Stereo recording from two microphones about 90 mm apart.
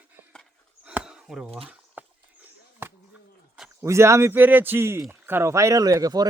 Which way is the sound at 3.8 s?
30° right (ahead or behind).